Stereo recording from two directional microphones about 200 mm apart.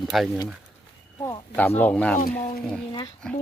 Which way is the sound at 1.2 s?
15° left (ahead or behind).